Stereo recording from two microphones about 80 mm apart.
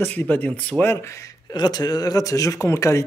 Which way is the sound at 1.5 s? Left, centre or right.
Left.